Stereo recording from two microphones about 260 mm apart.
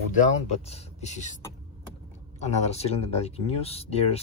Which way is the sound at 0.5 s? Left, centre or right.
Left.